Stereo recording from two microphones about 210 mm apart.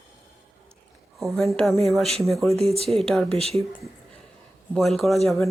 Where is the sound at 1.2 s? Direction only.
Centre (ahead or behind).